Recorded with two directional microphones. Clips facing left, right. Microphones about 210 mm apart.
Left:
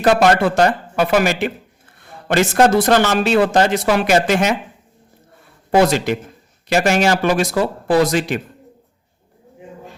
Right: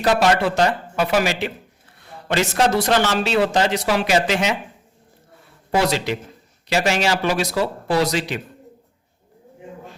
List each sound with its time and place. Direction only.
0.0 s speech: 50° left (ahead or behind)
5.7 s speech: 50° left (ahead or behind)